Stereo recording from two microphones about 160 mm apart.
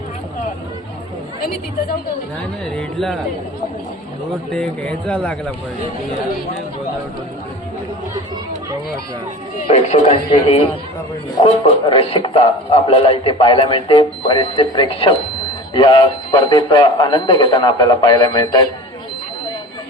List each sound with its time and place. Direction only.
2.7 s speech: centre (ahead or behind)
4.5 s speech: 5° left (ahead or behind)
9.6 s a man's voice: 45° left (ahead or behind); by 18.7 s 25° left (ahead or behind)